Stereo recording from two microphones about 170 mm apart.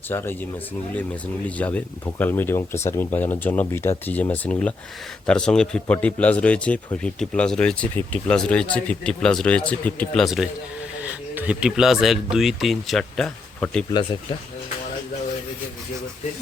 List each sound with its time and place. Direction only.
0.1 s a man's voice: 15° left (ahead or behind)
13.9 s speech: 30° left (ahead or behind)